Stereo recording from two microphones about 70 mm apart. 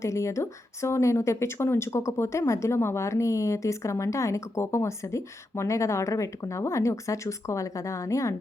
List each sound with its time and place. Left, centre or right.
0.0 s speech: left